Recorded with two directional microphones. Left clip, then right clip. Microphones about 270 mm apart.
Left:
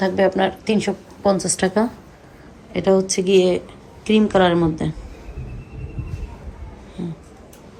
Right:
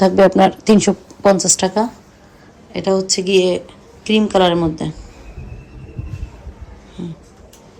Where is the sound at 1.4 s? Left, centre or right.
Centre.